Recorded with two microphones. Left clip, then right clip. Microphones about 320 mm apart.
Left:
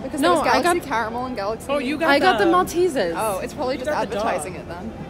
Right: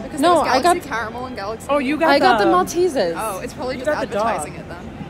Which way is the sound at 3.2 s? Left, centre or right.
Left.